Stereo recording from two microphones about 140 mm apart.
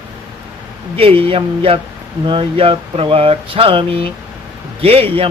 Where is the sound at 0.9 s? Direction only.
40° right (ahead or behind).